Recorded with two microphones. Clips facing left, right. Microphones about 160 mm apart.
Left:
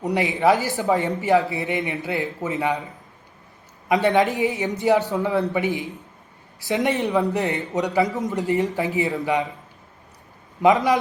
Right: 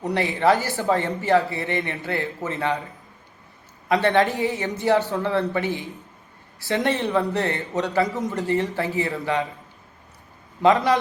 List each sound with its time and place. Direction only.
0.1 s speech: 15° left (ahead or behind)
3.8 s speech: 15° left (ahead or behind)
8.0 s a man's voice: centre (ahead or behind)
8.4 s speech: 20° left (ahead or behind)
10.6 s speech: 15° left (ahead or behind)